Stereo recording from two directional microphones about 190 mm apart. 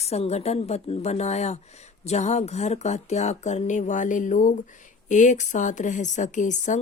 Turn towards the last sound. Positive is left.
turn(degrees=40)  # may be behind; listen again after turning